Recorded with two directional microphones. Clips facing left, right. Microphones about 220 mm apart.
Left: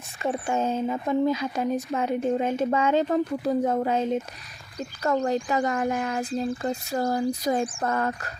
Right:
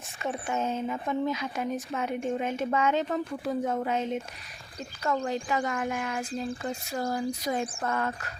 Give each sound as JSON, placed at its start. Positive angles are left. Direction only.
{"t": 0.2, "sound": "speech", "side_deg": 30}